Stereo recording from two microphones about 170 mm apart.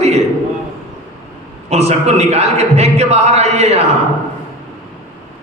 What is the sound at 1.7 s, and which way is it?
A man's voice, 40° right (ahead or behind).